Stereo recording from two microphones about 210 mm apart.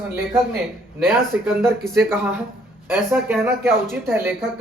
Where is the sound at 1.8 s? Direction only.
Centre (ahead or behind).